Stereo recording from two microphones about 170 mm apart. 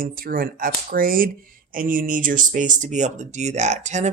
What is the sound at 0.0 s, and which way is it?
Speech, 60° right (ahead or behind).